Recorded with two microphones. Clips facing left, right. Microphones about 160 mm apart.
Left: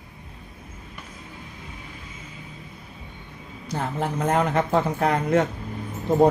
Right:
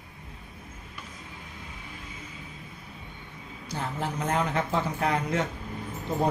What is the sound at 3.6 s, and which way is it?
A woman's voice, 55° left (ahead or behind).